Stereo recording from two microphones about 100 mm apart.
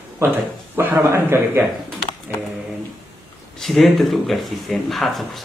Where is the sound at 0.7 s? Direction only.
20° right (ahead or behind).